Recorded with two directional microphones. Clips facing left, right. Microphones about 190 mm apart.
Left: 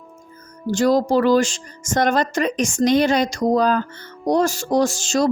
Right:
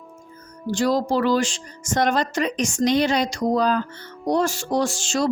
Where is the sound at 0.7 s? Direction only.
45° left (ahead or behind).